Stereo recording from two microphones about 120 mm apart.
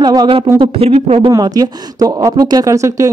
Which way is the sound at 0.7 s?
55° right (ahead or behind).